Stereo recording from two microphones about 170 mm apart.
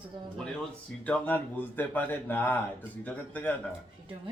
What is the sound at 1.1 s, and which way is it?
Speech, 10° left (ahead or behind).